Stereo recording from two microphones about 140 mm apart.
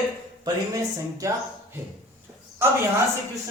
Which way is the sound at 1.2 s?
20° right (ahead or behind).